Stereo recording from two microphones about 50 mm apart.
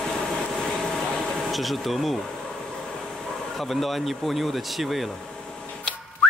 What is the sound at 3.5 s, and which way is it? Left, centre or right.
Speech, centre.